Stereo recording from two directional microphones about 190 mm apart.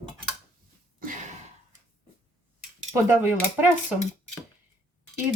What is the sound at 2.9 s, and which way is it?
Speech, 10° right (ahead or behind).